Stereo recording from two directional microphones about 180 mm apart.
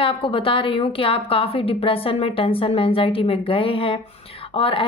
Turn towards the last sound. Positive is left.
turn(degrees=30)  # may be behind; listen again after turning